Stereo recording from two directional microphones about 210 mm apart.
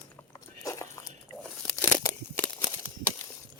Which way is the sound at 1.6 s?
5° left (ahead or behind).